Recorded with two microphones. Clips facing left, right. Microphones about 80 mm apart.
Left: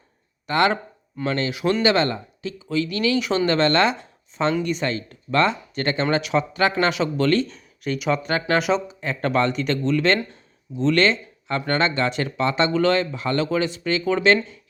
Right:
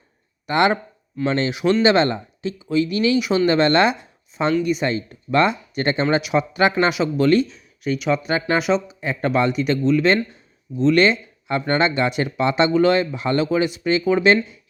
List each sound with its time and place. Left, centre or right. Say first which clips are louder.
0.4 s speech: right 2 dB; centre
3.2 s speech: right 2 dB; centre
7.4 s speech: right 3 dB; centre